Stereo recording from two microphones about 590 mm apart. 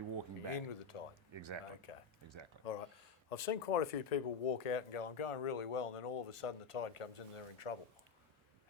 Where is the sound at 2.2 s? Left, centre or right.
Right.